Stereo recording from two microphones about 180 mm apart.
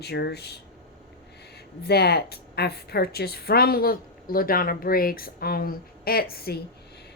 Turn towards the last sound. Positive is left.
turn(degrees=60)  # may be behind; listen again after turning